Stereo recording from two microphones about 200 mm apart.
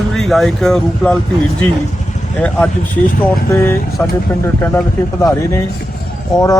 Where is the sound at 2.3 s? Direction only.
10° left (ahead or behind).